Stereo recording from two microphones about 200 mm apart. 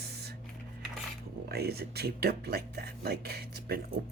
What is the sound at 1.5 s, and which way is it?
Speech, 50° right (ahead or behind).